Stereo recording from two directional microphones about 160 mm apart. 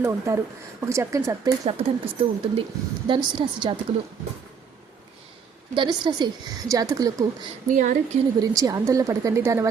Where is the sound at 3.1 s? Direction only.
30° right (ahead or behind).